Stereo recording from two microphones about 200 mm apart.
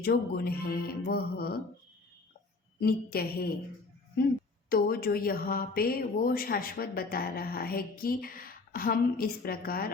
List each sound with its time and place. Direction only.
0.0 s speech: 50° left (ahead or behind)
2.8 s speech: 50° left (ahead or behind)
4.7 s speech: 50° left (ahead or behind)